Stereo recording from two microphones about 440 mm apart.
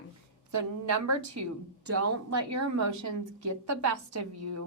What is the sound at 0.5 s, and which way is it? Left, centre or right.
A woman's voice, right.